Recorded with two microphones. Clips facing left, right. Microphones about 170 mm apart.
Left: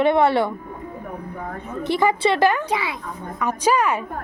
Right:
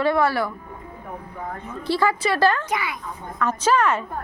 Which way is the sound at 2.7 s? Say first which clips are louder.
Left 2 dB; 30° left (ahead or behind).